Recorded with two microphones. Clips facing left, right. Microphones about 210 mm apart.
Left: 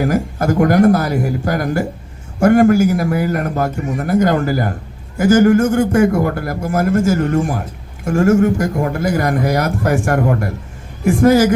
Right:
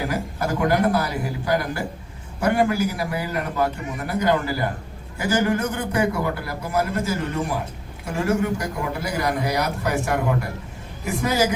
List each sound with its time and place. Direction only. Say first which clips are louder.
0.0 s a man's voice: left 9 dB; 45° left (ahead or behind)